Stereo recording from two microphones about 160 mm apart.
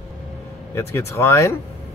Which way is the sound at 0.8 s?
15° left (ahead or behind).